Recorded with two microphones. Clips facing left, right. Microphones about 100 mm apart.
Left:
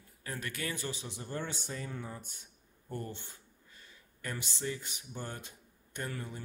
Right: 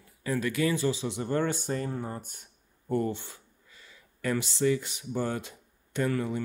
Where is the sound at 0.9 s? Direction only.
80° right; by 2.4 s 50° right (ahead or behind).